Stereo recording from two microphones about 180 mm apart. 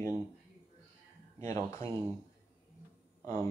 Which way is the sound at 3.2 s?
15° left (ahead or behind).